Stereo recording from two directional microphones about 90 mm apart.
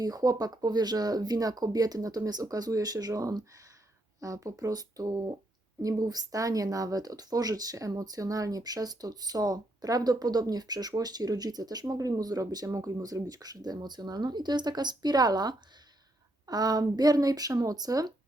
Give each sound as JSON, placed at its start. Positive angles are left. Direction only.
{"t": 0.0, "sound": "speech", "side_deg": -45}